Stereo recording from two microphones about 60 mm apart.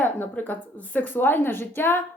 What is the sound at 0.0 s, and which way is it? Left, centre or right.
A woman's voice, left.